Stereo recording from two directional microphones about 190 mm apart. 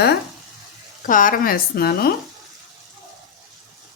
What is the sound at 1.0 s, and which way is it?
Speech, 45° left (ahead or behind).